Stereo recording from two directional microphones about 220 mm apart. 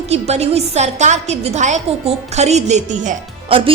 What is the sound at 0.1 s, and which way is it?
A woman's voice, 30° right (ahead or behind).